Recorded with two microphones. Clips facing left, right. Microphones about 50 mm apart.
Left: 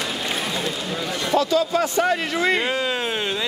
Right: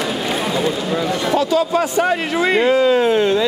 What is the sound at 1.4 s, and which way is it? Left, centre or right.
A man's voice, right.